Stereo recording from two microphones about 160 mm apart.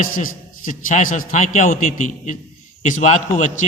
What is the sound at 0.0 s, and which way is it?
A man's voice, 55° left (ahead or behind).